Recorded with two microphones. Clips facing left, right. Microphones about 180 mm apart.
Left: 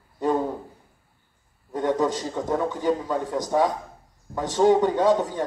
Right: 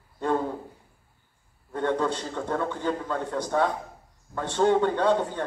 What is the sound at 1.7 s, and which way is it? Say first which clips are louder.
A man's voice: left 3 dB; 15° left (ahead or behind).